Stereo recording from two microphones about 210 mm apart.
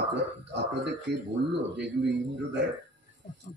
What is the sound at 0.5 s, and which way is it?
Speech, 55° right (ahead or behind).